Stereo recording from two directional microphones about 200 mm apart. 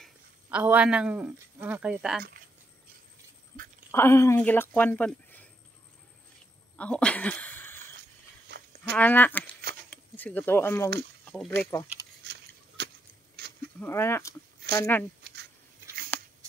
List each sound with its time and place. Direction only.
0.0 s a man's voice: 5° right (ahead or behind)
3.9 s speech: 10° left (ahead or behind)
6.8 s a sound: 5° left (ahead or behind)
8.5 s livestock: 55° right (ahead or behind)
8.9 s speech: 10° left (ahead or behind)
12.3 s a sound: 55° right (ahead or behind)
13.7 s speech: 10° left (ahead or behind)